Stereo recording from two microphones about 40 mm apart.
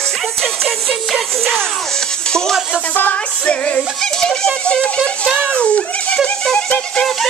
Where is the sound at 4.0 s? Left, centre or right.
Centre.